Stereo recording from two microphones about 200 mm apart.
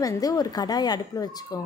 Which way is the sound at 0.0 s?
15° left (ahead or behind).